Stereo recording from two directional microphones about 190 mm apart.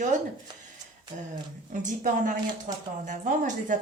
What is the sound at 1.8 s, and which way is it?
Speech, 45° right (ahead or behind).